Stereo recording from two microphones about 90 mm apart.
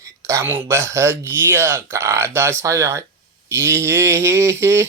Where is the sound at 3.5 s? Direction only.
30° right (ahead or behind).